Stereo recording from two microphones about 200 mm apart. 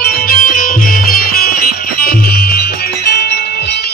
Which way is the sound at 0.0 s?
45° left (ahead or behind).